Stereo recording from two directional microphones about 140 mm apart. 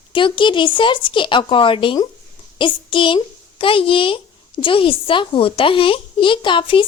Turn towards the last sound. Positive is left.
turn(degrees=35)  # may be behind; listen again after turning